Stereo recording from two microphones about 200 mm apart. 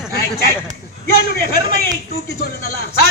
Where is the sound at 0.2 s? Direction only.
50° left (ahead or behind).